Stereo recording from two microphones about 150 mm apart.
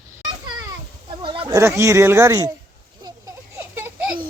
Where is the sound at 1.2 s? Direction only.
35° right (ahead or behind).